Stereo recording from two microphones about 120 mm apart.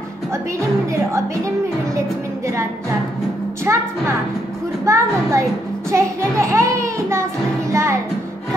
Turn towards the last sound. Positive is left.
turn(degrees=-25)  # may be behind; listen again after turning